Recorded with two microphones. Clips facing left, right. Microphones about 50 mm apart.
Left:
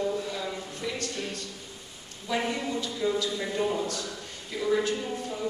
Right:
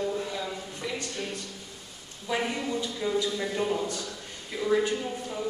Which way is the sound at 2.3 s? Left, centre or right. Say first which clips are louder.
Even; centre.